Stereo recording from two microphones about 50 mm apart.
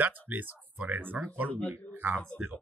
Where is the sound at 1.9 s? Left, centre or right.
Right.